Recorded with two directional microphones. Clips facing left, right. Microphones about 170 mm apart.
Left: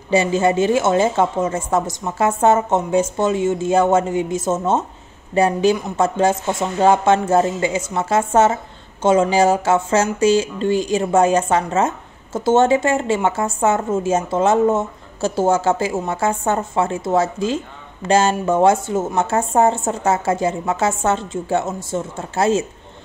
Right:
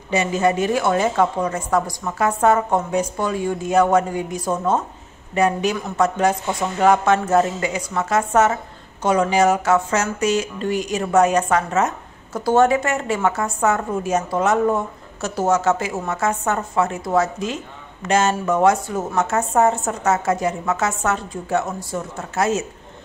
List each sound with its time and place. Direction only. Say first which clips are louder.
0.1 s speech: left 3 dB; 30° left (ahead or behind)